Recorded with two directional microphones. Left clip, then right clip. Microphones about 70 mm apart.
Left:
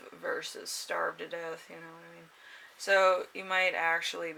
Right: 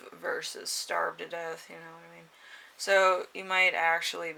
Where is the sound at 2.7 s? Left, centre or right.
Right.